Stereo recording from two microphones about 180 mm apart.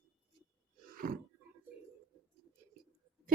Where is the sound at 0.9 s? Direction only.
55° right (ahead or behind).